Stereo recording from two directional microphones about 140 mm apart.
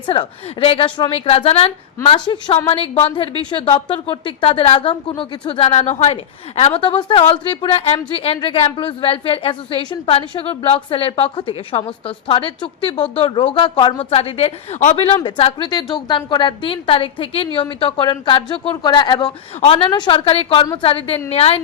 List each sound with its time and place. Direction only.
0.1 s a woman's voice: 40° left (ahead or behind)
2.0 s a woman's voice: 35° left (ahead or behind); by 6.1 s 50° left (ahead or behind)
6.6 s a woman's voice: 40° left (ahead or behind)
14.0 s a woman's voice: 45° left (ahead or behind)
14.9 s a woman's voice: 45° left (ahead or behind)
19.6 s a woman's voice: 45° left (ahead or behind)